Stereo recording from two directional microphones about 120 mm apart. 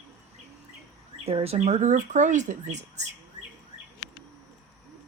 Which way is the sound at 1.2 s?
55° right (ahead or behind).